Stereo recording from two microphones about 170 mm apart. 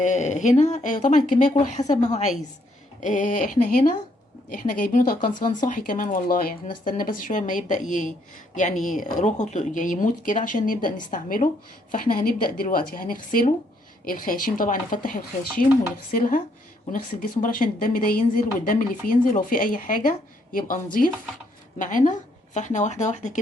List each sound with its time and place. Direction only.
0.0 s speech: 45° left (ahead or behind)
17.4 s speech: 55° left (ahead or behind)